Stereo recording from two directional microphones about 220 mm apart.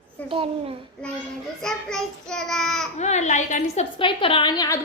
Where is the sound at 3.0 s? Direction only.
30° left (ahead or behind).